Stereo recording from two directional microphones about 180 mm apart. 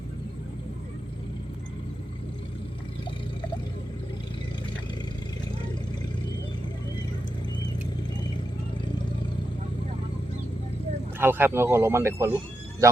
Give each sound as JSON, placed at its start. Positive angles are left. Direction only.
{"t": 11.2, "sound": "speech", "side_deg": -10}